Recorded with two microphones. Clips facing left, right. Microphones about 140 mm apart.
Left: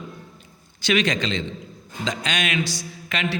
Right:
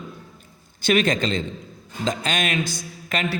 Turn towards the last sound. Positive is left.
turn(degrees=-45)  # may be behind; listen again after turning